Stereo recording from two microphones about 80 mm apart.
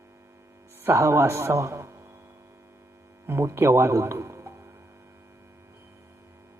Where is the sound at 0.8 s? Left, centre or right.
Right.